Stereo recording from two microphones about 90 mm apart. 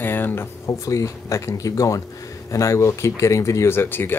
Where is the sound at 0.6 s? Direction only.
35° left (ahead or behind).